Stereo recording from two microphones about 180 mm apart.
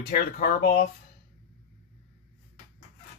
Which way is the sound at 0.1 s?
55° left (ahead or behind).